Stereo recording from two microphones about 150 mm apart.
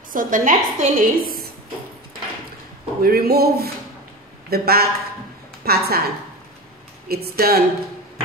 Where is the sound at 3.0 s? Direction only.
90° right.